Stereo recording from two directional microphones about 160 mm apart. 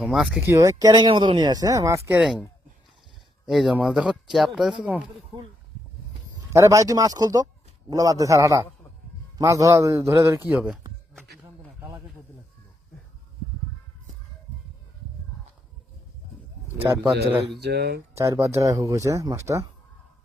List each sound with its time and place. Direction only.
0.0 s speech: centre (ahead or behind)
0.4 s speech: 20° right (ahead or behind)
3.4 s speech: centre (ahead or behind)
6.5 s a man's voice: 20° right (ahead or behind)
11.4 s a sound: 20° right (ahead or behind)
16.7 s a man's voice: 15° right (ahead or behind)
17.6 s speech: 90° right
18.1 s speech: 15° right (ahead or behind)